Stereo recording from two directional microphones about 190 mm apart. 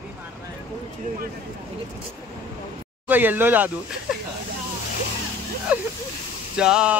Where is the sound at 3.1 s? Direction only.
10° right (ahead or behind).